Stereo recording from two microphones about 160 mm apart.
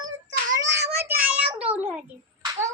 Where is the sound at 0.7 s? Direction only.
90° right.